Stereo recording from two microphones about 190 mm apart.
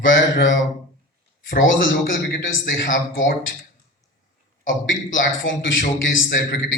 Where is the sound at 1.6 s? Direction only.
90° left.